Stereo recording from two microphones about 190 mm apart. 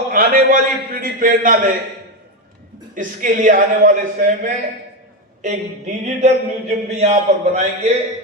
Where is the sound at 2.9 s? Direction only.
40° right (ahead or behind).